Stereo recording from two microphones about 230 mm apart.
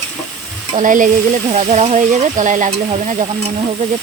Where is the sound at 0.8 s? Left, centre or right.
Right.